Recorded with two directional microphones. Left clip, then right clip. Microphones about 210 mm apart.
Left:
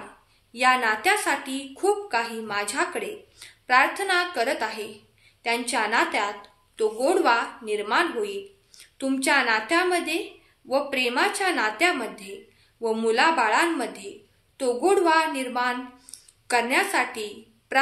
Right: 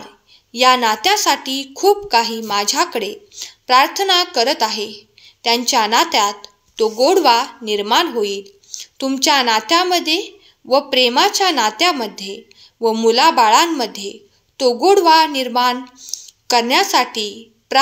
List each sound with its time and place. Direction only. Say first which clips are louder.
0.5 s a woman's voice: right 8 dB; 40° right (ahead or behind)